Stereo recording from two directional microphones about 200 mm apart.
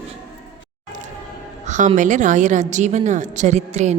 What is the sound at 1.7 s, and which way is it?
A woman's voice, 40° right (ahead or behind).